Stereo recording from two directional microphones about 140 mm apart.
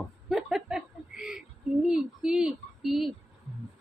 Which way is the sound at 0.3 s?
Centre (ahead or behind).